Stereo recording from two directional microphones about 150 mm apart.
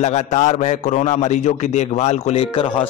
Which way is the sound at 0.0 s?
50° left (ahead or behind).